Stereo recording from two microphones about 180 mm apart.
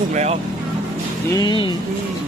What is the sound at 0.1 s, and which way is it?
Speech, 40° right (ahead or behind).